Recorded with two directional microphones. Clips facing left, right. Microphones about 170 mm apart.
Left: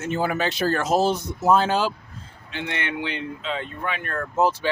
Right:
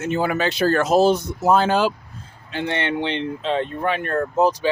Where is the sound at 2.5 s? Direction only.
35° right (ahead or behind).